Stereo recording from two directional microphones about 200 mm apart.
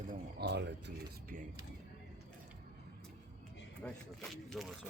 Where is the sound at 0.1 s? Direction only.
55° right (ahead or behind).